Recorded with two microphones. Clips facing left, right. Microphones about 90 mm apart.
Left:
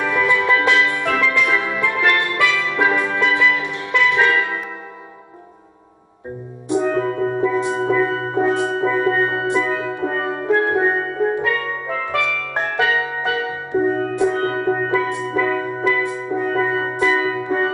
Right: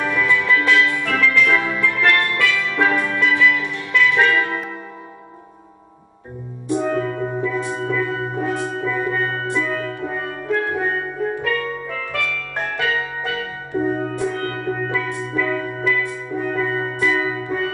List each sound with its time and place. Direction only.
0.2 s music: 25° left (ahead or behind)
7.1 s music: 5° right (ahead or behind)
7.5 s music: 20° left (ahead or behind)
9.7 s music: 5° left (ahead or behind)
9.9 s music: 25° left (ahead or behind)